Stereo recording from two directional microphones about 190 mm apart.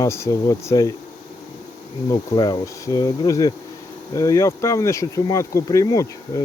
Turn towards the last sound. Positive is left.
turn(degrees=15)  # may be behind; listen again after turning